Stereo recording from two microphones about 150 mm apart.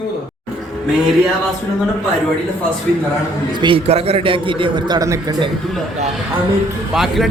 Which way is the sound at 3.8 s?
40° right (ahead or behind).